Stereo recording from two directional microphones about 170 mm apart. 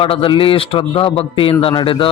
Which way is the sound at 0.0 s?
30° left (ahead or behind).